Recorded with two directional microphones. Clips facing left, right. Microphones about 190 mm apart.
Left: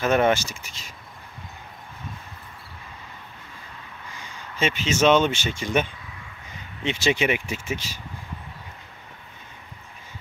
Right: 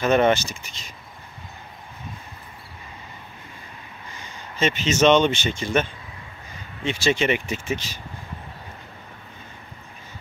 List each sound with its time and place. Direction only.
0.0 s speech: 5° left (ahead or behind)
4.6 s speech: 10° left (ahead or behind)
7.2 s speech: 10° left (ahead or behind)